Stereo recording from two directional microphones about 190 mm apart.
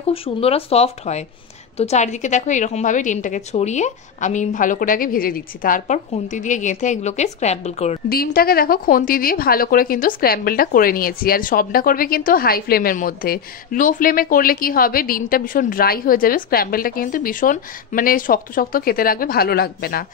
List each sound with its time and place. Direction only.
0.1 s a woman's voice: 30° left (ahead or behind)
8.1 s a woman's voice: 50° left (ahead or behind)